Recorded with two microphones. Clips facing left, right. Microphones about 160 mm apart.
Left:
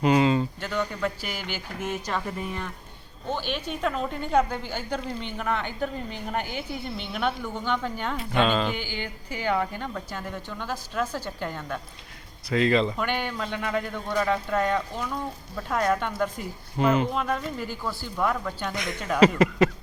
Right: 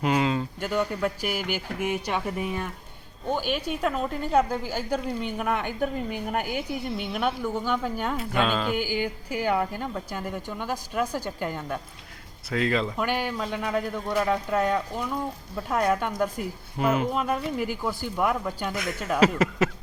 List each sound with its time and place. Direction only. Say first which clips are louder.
0.0 s a woman's voice: left 3 dB; centre (ahead or behind)